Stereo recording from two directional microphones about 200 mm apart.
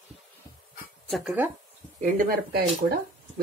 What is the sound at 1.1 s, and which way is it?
Speech, 5° right (ahead or behind).